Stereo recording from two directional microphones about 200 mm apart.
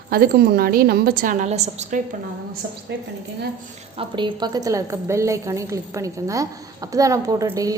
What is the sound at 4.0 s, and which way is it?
A woman's voice, 25° right (ahead or behind).